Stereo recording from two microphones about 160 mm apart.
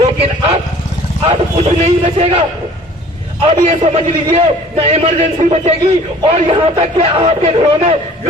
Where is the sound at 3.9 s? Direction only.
40° right (ahead or behind).